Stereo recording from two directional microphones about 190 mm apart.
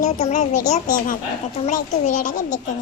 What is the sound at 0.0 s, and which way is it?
Speech, 40° left (ahead or behind).